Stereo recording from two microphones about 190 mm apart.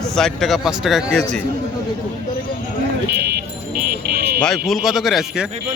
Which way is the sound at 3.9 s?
55° right (ahead or behind).